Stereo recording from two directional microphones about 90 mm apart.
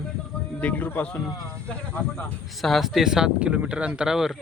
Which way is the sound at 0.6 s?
20° left (ahead or behind).